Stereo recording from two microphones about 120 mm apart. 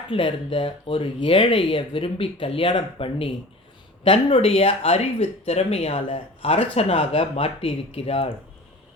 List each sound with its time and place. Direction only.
0.1 s speech: 45° left (ahead or behind)